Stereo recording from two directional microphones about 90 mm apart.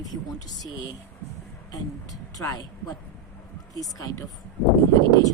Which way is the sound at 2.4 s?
45° left (ahead or behind).